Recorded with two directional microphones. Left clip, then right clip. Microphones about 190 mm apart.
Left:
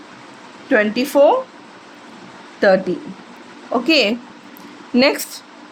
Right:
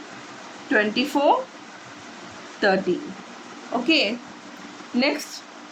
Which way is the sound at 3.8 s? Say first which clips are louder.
Left 5 dB; 45° left (ahead or behind).